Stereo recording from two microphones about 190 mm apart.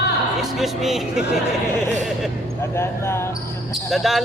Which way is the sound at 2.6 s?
15° left (ahead or behind).